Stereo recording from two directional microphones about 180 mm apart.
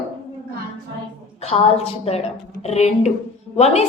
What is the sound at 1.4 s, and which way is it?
A woman's voice, 35° left (ahead or behind).